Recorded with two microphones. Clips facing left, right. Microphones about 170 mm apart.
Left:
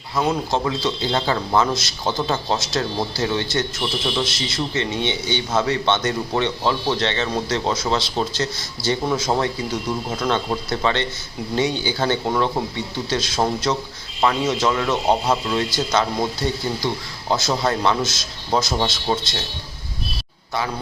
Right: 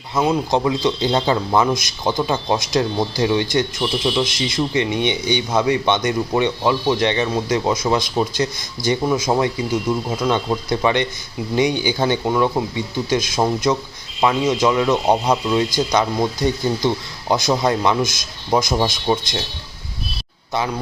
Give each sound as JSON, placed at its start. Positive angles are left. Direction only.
{"t": 0.2, "sound": "speech", "side_deg": -15}
{"t": 12.2, "sound": "speech", "side_deg": -5}